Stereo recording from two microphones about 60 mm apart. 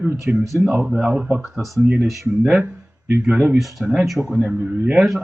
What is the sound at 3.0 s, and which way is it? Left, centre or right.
Speech, right.